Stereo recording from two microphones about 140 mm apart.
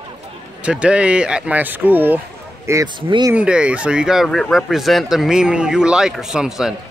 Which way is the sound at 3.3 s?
10° right (ahead or behind).